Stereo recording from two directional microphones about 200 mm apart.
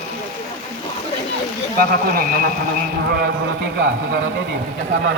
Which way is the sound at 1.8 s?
45° right (ahead or behind).